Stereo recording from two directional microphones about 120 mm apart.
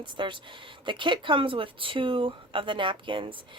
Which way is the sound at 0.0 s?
40° right (ahead or behind).